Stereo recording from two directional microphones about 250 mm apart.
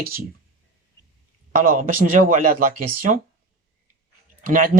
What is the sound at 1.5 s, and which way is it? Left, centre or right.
Speech, right.